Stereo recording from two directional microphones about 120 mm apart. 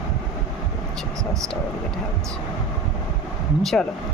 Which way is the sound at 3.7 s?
5° left (ahead or behind).